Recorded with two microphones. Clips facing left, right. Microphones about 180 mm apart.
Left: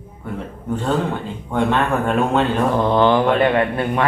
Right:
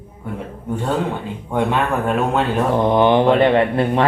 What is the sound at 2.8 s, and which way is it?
Speech, 15° right (ahead or behind).